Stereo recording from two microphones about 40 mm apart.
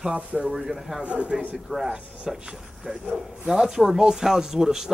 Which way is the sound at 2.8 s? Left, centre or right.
Centre.